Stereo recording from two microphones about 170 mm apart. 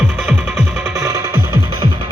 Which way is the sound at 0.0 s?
10° right (ahead or behind).